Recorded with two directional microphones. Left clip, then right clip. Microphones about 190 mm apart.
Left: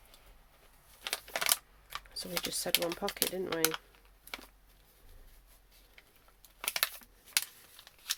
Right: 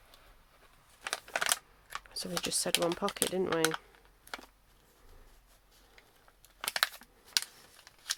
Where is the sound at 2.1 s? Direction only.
30° right (ahead or behind).